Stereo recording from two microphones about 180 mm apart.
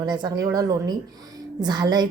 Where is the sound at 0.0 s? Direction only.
25° right (ahead or behind).